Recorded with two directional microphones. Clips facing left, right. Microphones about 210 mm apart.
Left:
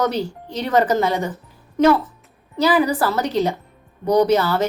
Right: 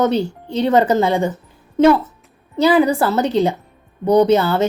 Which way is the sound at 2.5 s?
25° right (ahead or behind).